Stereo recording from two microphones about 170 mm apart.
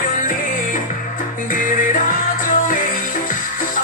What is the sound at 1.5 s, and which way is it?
Music, 50° left (ahead or behind).